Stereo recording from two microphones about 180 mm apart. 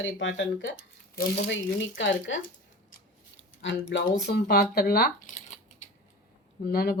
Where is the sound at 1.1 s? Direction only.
70° left (ahead or behind); by 2.4 s 90° left.